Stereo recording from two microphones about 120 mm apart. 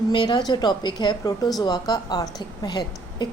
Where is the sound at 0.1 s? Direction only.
35° left (ahead or behind).